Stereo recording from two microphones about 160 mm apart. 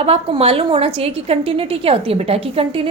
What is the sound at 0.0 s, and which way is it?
A woman's voice, 40° right (ahead or behind).